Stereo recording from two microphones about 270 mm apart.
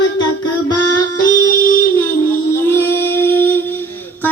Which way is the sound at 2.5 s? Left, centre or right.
Centre.